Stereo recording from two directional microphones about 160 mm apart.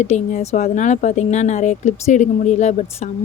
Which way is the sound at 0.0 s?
45° left (ahead or behind).